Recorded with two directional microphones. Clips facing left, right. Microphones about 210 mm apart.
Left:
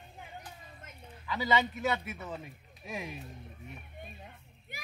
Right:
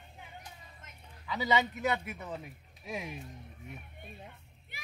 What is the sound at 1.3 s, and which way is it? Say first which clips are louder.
Speech: even; 20° right (ahead or behind).